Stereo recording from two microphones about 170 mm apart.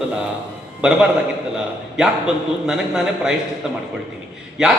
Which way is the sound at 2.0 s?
5° right (ahead or behind).